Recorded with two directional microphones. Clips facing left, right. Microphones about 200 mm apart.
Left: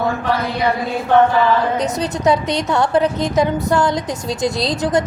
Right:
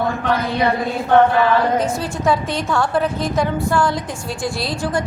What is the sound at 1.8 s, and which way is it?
A woman's voice, 20° left (ahead or behind).